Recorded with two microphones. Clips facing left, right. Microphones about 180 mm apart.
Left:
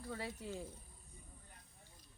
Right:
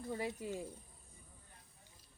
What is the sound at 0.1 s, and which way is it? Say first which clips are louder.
Speech: right 4 dB; 15° right (ahead or behind).